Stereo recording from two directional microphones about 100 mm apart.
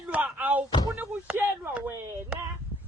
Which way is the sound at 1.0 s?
20° right (ahead or behind).